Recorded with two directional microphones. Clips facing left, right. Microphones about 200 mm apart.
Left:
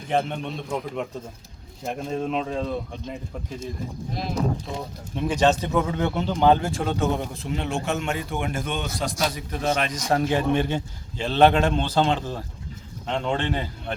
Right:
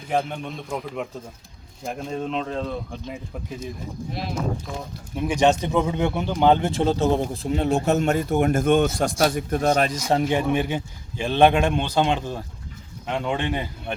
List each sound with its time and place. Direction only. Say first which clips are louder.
0.1 s speech: even; centre (ahead or behind)
5.1 s speech: right 1 dB; 10° right (ahead or behind); by 9.9 s 45° right (ahead or behind)
10.1 s a man's voice: left 2 dB; 15° right (ahead or behind)